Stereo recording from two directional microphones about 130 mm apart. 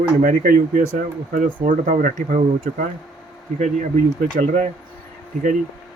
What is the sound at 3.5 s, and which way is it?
Speech, 75° right (ahead or behind).